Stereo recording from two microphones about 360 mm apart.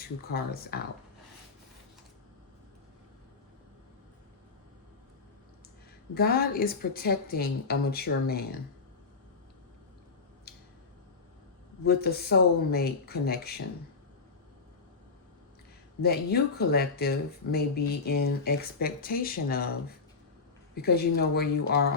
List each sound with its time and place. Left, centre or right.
0.0 s speech: left
6.1 s speech: left
11.9 s speech: left
16.0 s speech: left
20.7 s speech: left